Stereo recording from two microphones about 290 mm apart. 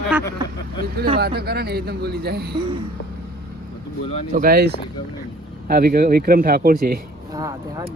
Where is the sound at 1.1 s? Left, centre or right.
Right.